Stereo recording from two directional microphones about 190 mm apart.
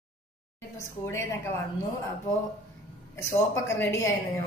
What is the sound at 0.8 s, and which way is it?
Speech, 15° left (ahead or behind).